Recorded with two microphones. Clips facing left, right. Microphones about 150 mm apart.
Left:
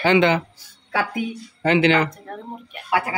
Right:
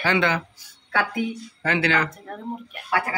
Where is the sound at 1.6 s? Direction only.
20° left (ahead or behind).